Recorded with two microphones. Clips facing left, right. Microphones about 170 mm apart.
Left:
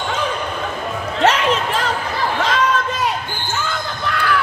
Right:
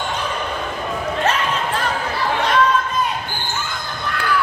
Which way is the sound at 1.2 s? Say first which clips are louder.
Left 7 dB; 90° left.